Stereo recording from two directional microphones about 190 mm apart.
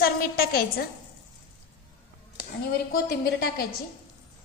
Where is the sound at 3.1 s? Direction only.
55° left (ahead or behind).